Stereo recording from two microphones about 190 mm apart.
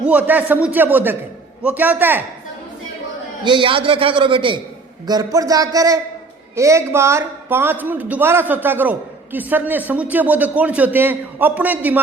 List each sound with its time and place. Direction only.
0.0 s a woman's voice: 10° right (ahead or behind)
3.4 s a man's voice: 25° right (ahead or behind); by 11.9 s 10° right (ahead or behind)